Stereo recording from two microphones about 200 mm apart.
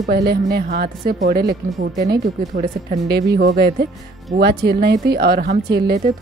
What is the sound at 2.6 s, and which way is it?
Speech, 50° right (ahead or behind).